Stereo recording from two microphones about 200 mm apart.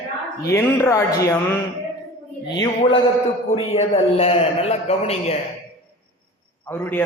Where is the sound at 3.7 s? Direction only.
30° left (ahead or behind).